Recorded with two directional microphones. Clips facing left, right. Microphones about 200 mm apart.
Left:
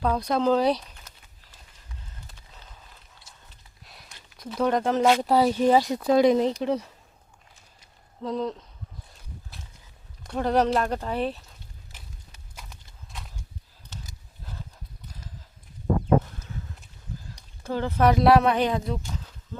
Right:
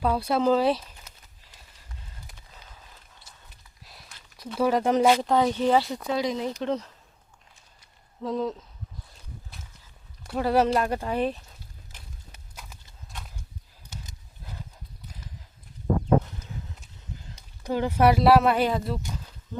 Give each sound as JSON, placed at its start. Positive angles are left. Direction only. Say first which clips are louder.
{"t": 0.0, "sound": "speech", "louder": "even", "side_deg": -5}
{"t": 3.8, "sound": "a sound", "louder": "left 1 dB", "side_deg": 0}
{"t": 5.1, "sound": "speech", "louder": "left 2 dB", "side_deg": 5}
{"t": 6.1, "sound": "speech", "louder": "left 9 dB", "side_deg": 50}
{"t": 6.6, "sound": "speech", "louder": "left 2 dB", "side_deg": 10}
{"t": 8.2, "sound": "speech", "louder": "even", "side_deg": 0}
{"t": 10.2, "sound": "speech", "louder": "even", "side_deg": -5}
{"t": 17.2, "sound": "speech", "louder": "right 2 dB", "side_deg": -20}